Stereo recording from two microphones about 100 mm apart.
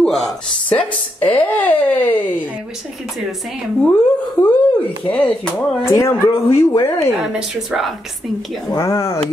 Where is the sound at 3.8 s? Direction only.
20° left (ahead or behind).